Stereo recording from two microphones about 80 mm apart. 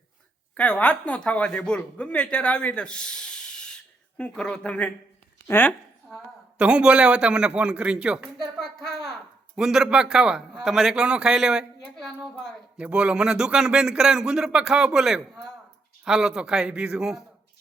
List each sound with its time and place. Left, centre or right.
0.5 s speech: centre
6.1 s a woman's voice: centre
6.6 s speech: centre
8.5 s a sound: centre
9.6 s speech: centre
11.9 s a woman's voice: centre
12.8 s speech: centre